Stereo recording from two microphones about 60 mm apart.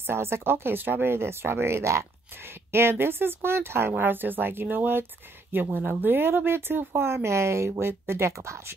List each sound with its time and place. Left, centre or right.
0.0 s speech: right